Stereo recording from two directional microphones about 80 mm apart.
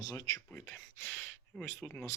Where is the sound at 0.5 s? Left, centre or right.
Left.